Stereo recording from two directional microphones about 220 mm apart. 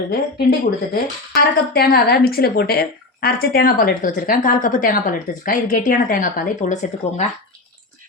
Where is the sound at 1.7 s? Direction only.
45° left (ahead or behind).